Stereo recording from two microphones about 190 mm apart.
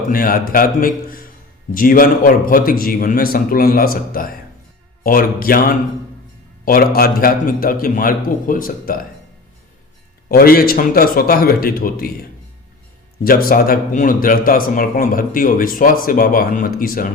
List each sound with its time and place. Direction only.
0.1 s a man's voice: 50° left (ahead or behind)
10.2 s a man's voice: 50° left (ahead or behind)
13.2 s a man's voice: 50° left (ahead or behind)